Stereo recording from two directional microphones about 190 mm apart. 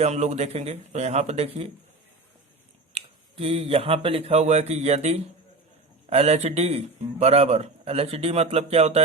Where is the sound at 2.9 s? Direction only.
30° right (ahead or behind).